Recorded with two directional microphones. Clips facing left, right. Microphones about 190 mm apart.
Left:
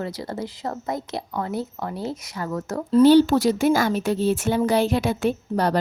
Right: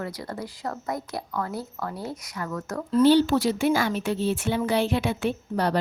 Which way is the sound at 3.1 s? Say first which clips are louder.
Left 3 dB; 45° left (ahead or behind).